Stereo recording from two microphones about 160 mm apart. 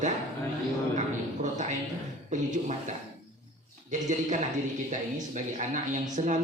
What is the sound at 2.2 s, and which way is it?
A man's voice, 50° right (ahead or behind).